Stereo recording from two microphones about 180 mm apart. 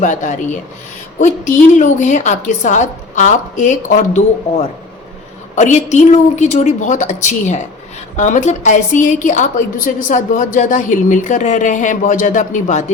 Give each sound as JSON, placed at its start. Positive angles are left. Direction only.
{"t": 0.0, "sound": "a woman's voice", "side_deg": 45}
{"t": 5.5, "sound": "a woman's voice", "side_deg": 40}